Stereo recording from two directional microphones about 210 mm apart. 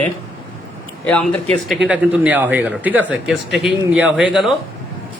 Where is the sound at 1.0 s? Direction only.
5° left (ahead or behind).